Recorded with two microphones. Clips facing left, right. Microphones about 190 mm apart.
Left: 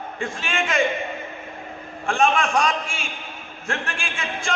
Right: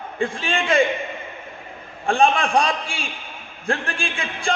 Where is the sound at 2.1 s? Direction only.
35° right (ahead or behind).